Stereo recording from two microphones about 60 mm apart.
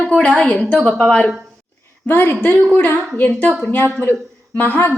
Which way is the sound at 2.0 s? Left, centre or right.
Left.